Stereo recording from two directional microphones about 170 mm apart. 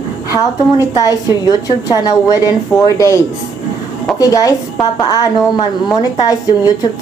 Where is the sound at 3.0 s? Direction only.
20° left (ahead or behind).